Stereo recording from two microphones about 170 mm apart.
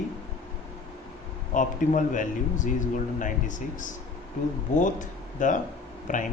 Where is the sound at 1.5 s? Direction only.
50° left (ahead or behind).